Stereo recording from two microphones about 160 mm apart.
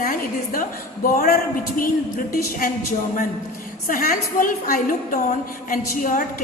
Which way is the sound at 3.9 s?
60° left (ahead or behind).